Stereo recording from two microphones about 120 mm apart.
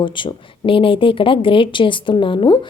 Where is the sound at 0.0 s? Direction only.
45° left (ahead or behind).